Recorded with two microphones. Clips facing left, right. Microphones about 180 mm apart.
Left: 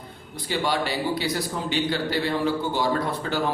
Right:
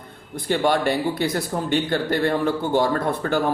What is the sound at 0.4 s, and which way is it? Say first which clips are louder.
Speech: right 6 dB; 50° right (ahead or behind).